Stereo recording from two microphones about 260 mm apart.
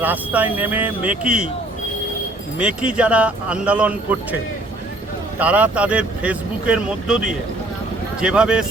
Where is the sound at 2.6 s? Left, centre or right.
Centre.